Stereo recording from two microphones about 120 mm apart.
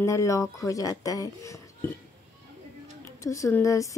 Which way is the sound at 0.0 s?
25° left (ahead or behind).